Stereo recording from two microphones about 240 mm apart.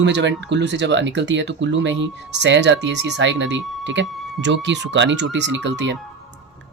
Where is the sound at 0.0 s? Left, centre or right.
Right.